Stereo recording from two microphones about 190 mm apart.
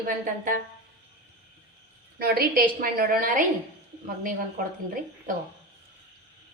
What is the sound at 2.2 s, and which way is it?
A woman's voice, 50° right (ahead or behind).